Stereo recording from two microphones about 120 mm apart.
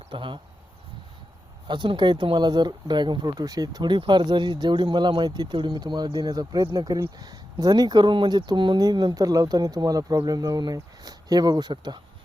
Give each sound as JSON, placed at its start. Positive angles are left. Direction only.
{"t": 0.1, "sound": "speech", "side_deg": -45}
{"t": 1.6, "sound": "speech", "side_deg": -40}